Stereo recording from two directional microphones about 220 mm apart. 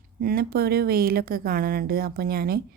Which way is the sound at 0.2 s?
45° right (ahead or behind).